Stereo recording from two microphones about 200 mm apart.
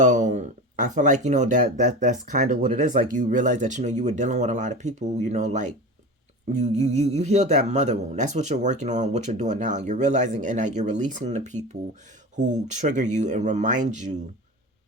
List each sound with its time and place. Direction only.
0.0 s speech: 40° right (ahead or behind)